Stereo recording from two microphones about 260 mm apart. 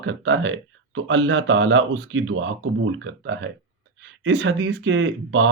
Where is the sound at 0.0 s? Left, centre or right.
Right.